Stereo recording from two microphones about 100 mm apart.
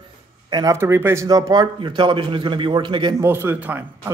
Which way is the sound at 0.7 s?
25° right (ahead or behind).